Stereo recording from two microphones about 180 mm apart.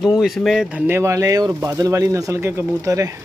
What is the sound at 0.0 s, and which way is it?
Speech, centre (ahead or behind).